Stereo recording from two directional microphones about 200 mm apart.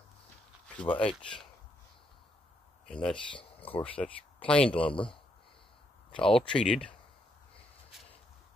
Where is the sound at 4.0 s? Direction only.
5° left (ahead or behind).